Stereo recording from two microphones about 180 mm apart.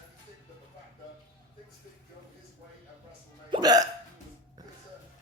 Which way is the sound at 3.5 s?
20° right (ahead or behind).